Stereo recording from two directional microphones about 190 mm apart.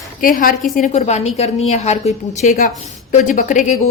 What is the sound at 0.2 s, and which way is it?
A woman's voice, 45° left (ahead or behind).